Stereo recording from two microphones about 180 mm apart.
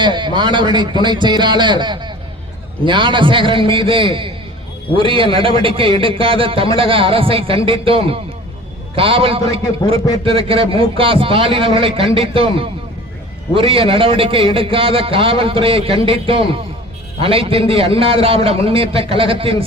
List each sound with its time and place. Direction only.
0.0 s a man's voice: 25° right (ahead or behind)